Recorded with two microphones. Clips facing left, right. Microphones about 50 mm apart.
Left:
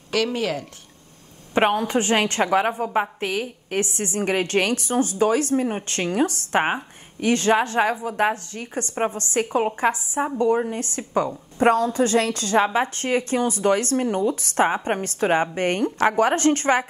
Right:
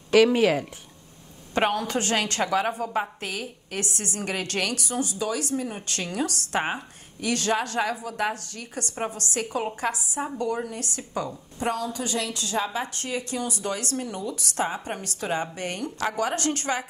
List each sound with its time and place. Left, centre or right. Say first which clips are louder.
0.1 s speech: right 5 dB; centre
1.5 s a woman's voice: left 5 dB; left